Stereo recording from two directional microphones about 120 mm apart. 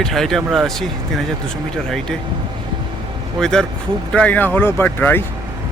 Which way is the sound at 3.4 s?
5° left (ahead or behind).